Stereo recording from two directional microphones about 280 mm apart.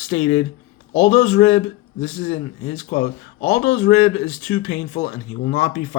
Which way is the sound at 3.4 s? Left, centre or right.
Left.